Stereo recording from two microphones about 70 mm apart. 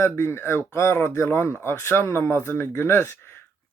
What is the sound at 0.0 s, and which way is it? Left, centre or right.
Speech, left.